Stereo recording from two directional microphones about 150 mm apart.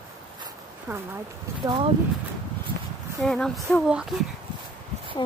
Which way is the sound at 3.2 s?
5° left (ahead or behind).